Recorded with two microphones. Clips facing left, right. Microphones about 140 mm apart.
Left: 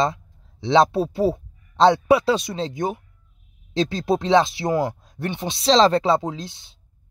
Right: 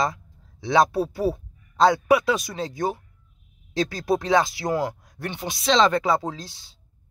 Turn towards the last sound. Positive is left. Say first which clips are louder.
# left 3 dB
turn(degrees=20)  # may be behind; listen again after turning